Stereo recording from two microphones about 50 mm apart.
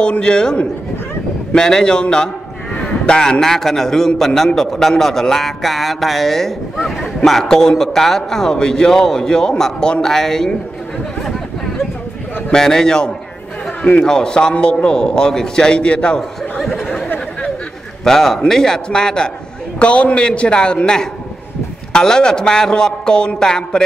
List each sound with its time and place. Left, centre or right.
0.0 s a man's voice: centre
12.5 s a man's voice: centre
16.2 s a sound: centre
18.0 s a man's voice: centre
19.8 s a man's voice: left